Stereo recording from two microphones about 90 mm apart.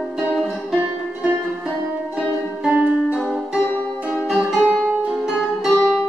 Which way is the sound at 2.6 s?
10° right (ahead or behind).